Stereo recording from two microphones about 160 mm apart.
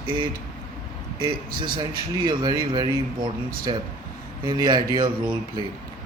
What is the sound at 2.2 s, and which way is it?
Speech, 25° right (ahead or behind).